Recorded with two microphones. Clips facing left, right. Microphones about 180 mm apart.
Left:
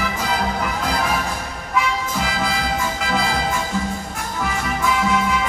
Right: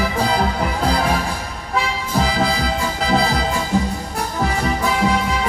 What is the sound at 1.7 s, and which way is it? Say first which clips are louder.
Music: right 1 dB; 35° right (ahead or behind).